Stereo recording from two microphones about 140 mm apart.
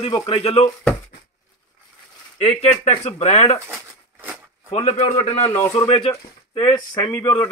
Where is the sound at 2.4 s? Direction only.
45° left (ahead or behind).